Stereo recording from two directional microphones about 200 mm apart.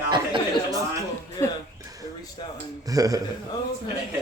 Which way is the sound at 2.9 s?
20° right (ahead or behind).